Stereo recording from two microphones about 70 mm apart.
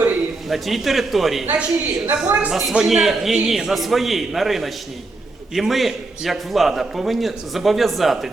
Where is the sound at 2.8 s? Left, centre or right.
Centre.